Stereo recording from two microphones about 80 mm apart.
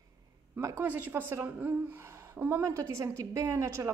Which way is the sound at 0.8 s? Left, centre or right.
Right.